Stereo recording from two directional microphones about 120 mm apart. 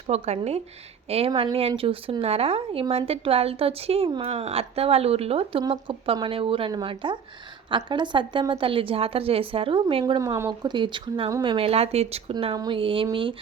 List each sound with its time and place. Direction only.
0.1 s a woman's voice: 60° right (ahead or behind); by 10.2 s 45° right (ahead or behind)
10.2 s speech: 25° right (ahead or behind)
10.6 s a woman's voice: 40° right (ahead or behind)